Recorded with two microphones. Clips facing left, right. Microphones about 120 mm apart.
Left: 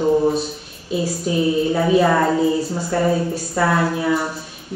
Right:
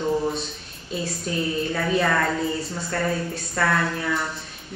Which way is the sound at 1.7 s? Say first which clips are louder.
Left 6 dB; 25° left (ahead or behind).